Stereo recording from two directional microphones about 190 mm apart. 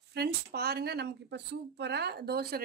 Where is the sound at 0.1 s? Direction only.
55° right (ahead or behind).